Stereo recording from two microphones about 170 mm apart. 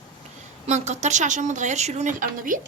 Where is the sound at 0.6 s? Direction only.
40° right (ahead or behind).